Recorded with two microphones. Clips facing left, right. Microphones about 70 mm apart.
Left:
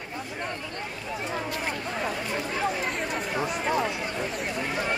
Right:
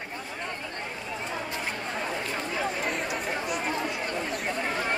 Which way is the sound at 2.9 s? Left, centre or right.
Centre.